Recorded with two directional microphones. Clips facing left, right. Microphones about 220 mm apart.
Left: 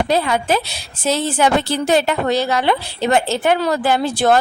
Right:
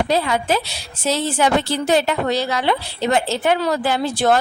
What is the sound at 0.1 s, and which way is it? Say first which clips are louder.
A woman's voice: left 2 dB; 55° left (ahead or behind).